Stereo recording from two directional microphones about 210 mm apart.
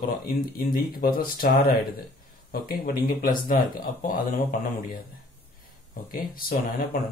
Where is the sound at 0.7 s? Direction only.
45° left (ahead or behind).